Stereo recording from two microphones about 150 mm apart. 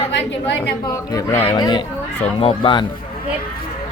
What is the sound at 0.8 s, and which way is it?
Speech, 25° left (ahead or behind).